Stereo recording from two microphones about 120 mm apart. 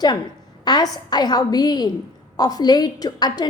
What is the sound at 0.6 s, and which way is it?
A woman's voice, 35° left (ahead or behind).